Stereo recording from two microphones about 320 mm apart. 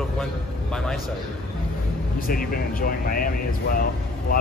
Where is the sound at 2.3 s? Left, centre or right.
Left.